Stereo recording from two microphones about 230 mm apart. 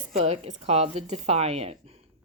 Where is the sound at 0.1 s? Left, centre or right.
Right.